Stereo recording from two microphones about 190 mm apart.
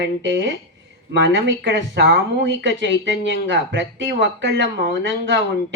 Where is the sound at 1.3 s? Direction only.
65° right (ahead or behind).